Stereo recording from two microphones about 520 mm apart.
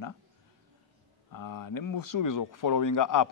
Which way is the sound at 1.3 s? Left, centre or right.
Left.